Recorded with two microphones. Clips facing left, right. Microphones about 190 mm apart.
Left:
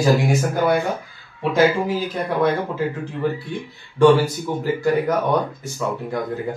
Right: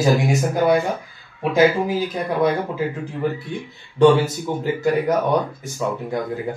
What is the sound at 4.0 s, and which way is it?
A man's voice, 20° right (ahead or behind).